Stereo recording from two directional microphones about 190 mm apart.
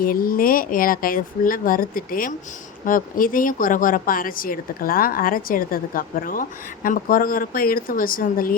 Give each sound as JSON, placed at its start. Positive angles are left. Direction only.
{"t": 0.0, "sound": "speech", "side_deg": 50}